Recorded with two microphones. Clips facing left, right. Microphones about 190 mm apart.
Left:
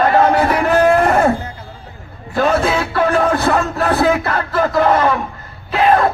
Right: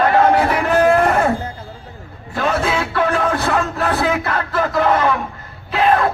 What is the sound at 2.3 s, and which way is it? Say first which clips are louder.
Music: left 4 dB; 40° left (ahead or behind).